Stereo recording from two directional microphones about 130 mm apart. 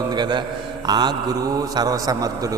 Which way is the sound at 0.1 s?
35° right (ahead or behind).